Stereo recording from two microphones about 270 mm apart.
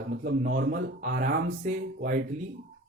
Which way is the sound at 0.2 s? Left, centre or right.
Right.